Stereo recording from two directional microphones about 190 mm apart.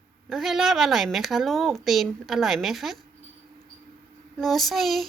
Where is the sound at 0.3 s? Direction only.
Centre (ahead or behind).